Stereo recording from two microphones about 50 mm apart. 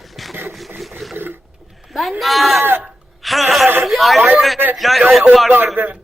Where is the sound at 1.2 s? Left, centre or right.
Right.